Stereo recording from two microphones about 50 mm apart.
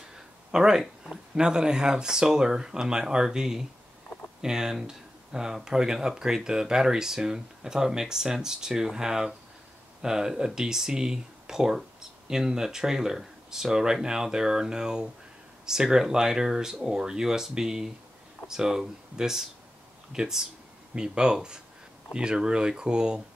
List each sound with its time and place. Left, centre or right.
0.5 s speech: centre